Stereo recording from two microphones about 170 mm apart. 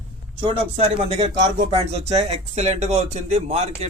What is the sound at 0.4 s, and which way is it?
Speech, 35° right (ahead or behind).